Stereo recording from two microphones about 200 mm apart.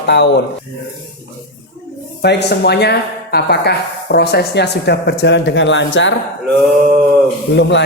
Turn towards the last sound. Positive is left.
turn(degrees=60)  # may be behind; listen again after turning